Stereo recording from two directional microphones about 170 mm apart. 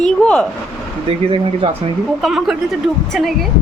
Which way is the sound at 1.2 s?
35° right (ahead or behind).